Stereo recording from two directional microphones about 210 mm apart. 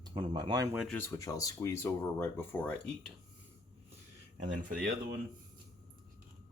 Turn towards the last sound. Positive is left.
turn(degrees=-40)  # may be behind; listen again after turning